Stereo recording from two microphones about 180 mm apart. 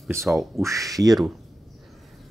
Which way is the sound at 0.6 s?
15° right (ahead or behind).